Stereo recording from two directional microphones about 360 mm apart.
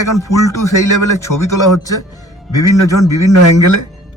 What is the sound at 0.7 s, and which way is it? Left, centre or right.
A man's voice, left.